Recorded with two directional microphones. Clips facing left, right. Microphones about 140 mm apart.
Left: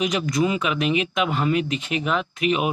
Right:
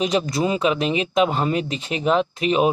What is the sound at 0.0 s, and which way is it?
Speech, 30° right (ahead or behind).